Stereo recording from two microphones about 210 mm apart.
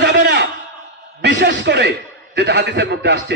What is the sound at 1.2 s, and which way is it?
A man's voice, 55° right (ahead or behind).